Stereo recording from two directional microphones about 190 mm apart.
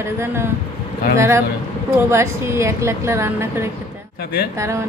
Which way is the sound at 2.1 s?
15° right (ahead or behind).